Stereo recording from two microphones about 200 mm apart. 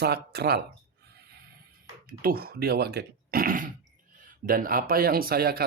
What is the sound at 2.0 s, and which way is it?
Speech, 45° right (ahead or behind).